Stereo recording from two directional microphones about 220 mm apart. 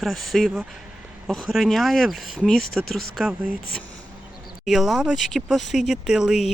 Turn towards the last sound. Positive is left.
turn(degrees=0)  # may be behind; listen again after turning